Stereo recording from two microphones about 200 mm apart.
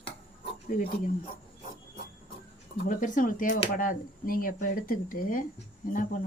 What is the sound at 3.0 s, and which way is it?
Speech, 40° left (ahead or behind).